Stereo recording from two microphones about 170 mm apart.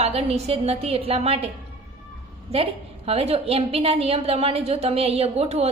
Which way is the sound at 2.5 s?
35° right (ahead or behind).